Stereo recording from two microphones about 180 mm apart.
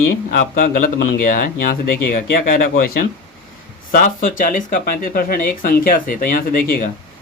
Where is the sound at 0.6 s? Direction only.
50° left (ahead or behind).